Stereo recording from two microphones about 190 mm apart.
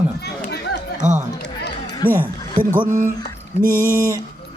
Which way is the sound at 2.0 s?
50° right (ahead or behind).